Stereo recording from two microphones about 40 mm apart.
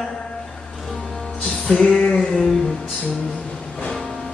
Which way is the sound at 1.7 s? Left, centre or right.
Centre.